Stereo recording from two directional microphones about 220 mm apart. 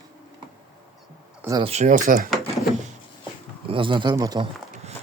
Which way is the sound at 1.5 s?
25° right (ahead or behind).